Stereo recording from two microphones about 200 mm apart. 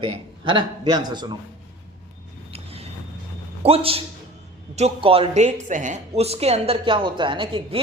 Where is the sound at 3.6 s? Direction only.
30° right (ahead or behind).